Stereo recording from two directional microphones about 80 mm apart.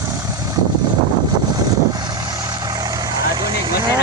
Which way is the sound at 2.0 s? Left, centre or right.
Right.